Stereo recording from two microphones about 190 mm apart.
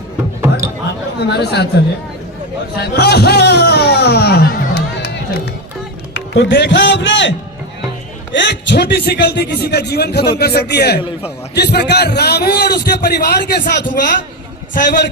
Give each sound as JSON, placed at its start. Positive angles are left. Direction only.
{"t": 1.2, "sound": "a man's voice", "side_deg": 60}
{"t": 2.7, "sound": "speech", "side_deg": 60}
{"t": 6.1, "sound": "a man's voice", "side_deg": 70}